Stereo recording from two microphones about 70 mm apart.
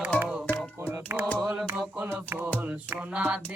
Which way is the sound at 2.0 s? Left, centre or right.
Right.